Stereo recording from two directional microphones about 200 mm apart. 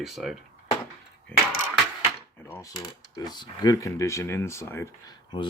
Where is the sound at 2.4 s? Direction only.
10° left (ahead or behind).